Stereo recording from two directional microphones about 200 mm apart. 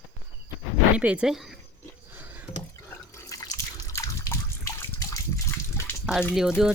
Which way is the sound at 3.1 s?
15° left (ahead or behind).